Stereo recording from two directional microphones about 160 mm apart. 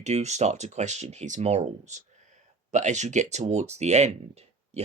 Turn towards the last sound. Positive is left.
turn(degrees=-45)  # may be behind; listen again after turning